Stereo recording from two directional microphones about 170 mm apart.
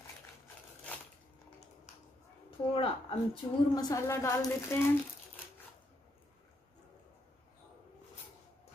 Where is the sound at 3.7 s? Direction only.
20° left (ahead or behind).